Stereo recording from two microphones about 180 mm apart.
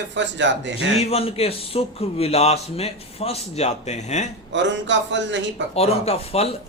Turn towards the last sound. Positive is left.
turn(degrees=35)  # may be behind; listen again after turning